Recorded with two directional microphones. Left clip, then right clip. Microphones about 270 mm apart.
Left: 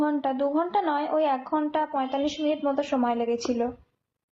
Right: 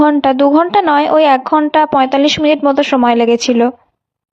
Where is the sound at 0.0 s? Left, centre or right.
Right.